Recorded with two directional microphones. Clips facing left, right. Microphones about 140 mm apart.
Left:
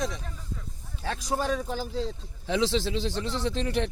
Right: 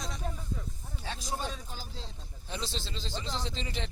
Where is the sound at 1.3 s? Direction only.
65° left (ahead or behind).